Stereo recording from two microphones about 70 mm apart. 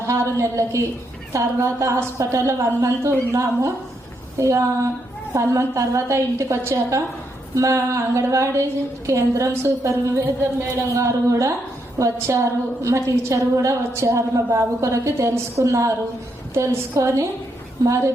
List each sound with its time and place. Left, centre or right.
0.1 s a woman's voice: right